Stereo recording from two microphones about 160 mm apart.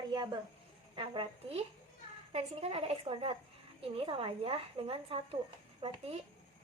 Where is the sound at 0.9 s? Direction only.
30° right (ahead or behind).